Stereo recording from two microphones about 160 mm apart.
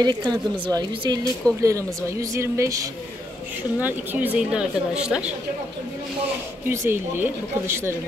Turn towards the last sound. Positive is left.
turn(degrees=-15)  # may be behind; listen again after turning